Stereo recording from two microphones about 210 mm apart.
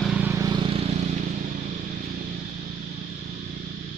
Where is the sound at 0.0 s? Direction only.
5° right (ahead or behind); by 0.9 s 25° right (ahead or behind).